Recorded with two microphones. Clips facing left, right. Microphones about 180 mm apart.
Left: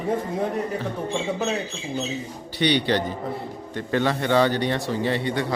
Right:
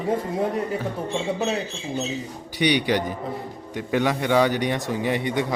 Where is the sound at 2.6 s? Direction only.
15° right (ahead or behind).